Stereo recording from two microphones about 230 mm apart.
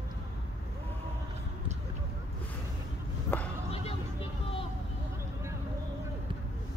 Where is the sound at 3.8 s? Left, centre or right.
Left.